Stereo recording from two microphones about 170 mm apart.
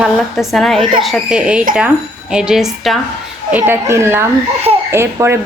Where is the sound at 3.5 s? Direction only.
15° right (ahead or behind).